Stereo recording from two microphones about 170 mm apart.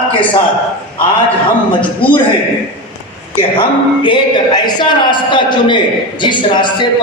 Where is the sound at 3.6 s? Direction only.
30° left (ahead or behind).